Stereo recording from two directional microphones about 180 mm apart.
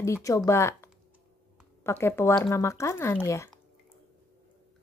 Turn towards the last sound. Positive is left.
turn(degrees=15)  # may be behind; listen again after turning